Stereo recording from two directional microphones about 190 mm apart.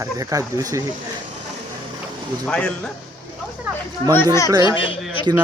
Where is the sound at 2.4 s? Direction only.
5° left (ahead or behind).